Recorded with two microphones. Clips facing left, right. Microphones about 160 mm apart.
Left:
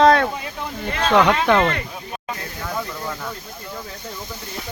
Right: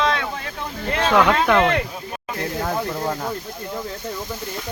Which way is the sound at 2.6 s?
45° right (ahead or behind).